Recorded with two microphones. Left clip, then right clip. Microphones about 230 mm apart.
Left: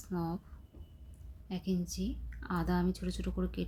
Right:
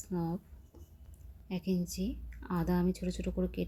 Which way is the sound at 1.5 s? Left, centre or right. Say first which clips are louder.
Right 2 dB; centre.